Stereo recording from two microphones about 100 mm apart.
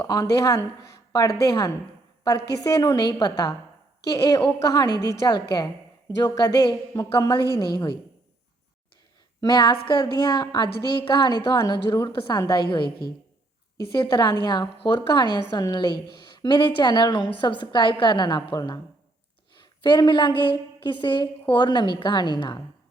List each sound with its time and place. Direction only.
0.1 s a woman's voice: 35° left (ahead or behind)
9.4 s a woman's voice: 45° left (ahead or behind)
13.9 s a woman's voice: 45° left (ahead or behind)
19.8 s a woman's voice: 50° left (ahead or behind)